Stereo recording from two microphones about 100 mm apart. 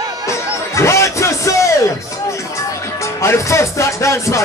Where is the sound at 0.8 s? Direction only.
30° left (ahead or behind).